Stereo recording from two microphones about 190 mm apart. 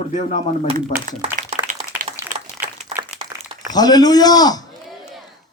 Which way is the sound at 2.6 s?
10° right (ahead or behind).